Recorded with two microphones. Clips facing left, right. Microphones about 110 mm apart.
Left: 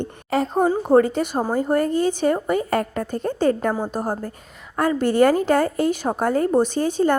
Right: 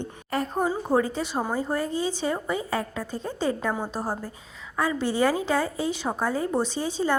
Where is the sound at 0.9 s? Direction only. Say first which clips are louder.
Left 9 dB; 60° left (ahead or behind).